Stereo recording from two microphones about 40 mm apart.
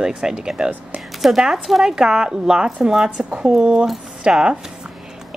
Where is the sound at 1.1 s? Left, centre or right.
Centre.